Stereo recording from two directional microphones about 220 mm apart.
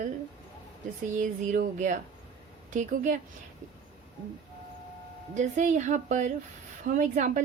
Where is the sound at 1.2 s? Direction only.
35° right (ahead or behind).